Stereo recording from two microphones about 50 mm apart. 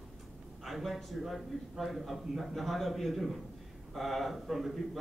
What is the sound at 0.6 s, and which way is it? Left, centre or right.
A man's voice, centre.